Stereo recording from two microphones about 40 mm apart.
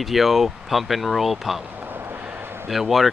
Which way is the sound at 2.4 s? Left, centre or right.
Right.